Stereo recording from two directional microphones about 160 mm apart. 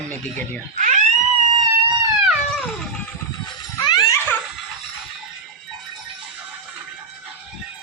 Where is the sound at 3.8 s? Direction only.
25° left (ahead or behind).